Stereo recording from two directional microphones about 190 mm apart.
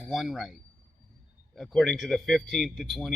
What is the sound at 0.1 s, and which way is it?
A man's voice, centre (ahead or behind).